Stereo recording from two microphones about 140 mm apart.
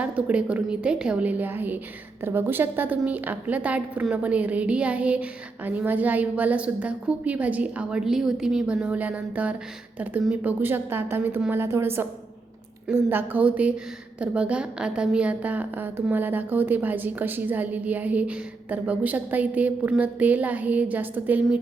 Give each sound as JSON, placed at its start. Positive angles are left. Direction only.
{"t": 0.0, "sound": "a woman's voice", "side_deg": -10}